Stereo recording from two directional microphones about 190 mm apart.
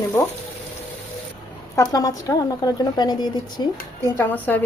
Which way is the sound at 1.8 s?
15° left (ahead or behind).